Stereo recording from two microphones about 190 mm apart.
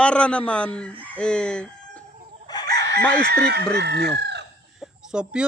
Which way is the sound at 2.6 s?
60° right (ahead or behind).